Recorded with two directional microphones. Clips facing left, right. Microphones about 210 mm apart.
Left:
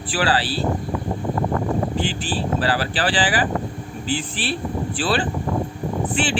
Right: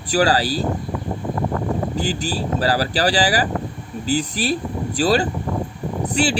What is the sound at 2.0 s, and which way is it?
Speech, 40° right (ahead or behind).